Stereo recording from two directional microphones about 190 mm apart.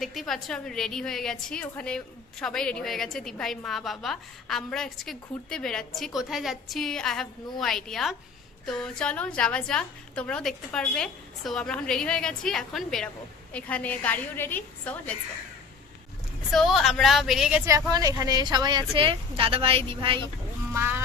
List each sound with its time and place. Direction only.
0.0 s a woman's voice: centre (ahead or behind)
16.5 s a woman's voice: centre (ahead or behind)
17.7 s a woman's voice: 20° right (ahead or behind)
20.7 s music: 10° right (ahead or behind)